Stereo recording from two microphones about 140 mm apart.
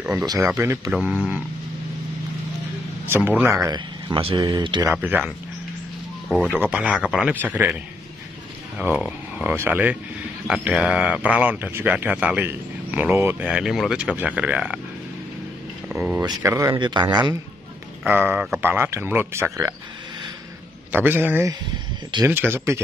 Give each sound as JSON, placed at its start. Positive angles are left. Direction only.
{"t": 0.6, "sound": "speech", "side_deg": -20}
{"t": 0.9, "sound": "a man's voice", "side_deg": -5}
{"t": 3.1, "sound": "a man's voice", "side_deg": -15}
{"t": 3.6, "sound": "speech", "side_deg": -35}
{"t": 4.9, "sound": "a man's voice", "side_deg": -10}
{"t": 6.5, "sound": "a man's voice", "side_deg": -10}
{"t": 8.7, "sound": "a man's voice", "side_deg": -5}
{"t": 13.5, "sound": "a man's voice", "side_deg": -5}
{"t": 15.9, "sound": "speech", "side_deg": -5}
{"t": 16.2, "sound": "speech", "side_deg": -25}
{"t": 16.7, "sound": "speech", "side_deg": -30}
{"t": 18.0, "sound": "a man's voice", "side_deg": -10}
{"t": 20.9, "sound": "a man's voice", "side_deg": -15}